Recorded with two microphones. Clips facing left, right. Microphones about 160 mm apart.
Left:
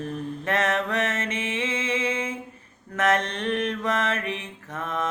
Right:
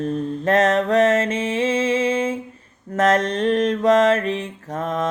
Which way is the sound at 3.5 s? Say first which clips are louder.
Right 11 dB; 40° right (ahead or behind).